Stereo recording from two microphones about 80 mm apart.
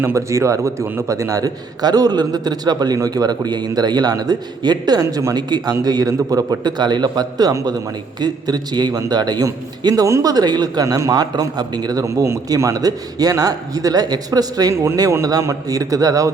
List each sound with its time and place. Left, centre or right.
0.0 s a man's voice: right
9.9 s a man's voice: right
10.8 s a man's voice: right
14.7 s a man's voice: right